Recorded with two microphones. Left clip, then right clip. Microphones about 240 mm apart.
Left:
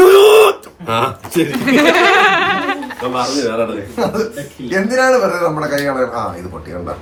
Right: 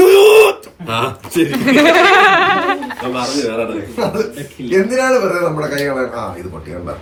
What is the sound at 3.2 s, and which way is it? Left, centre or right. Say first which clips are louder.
Speech: left 1 dB; centre.